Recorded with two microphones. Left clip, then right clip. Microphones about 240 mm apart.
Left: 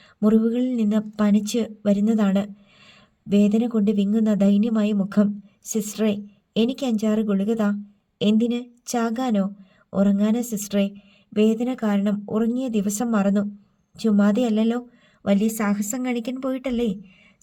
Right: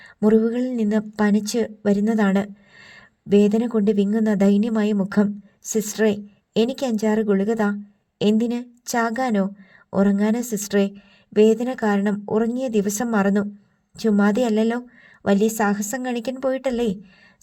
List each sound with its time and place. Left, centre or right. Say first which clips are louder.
0.0 s a woman's voice: right 3 dB; right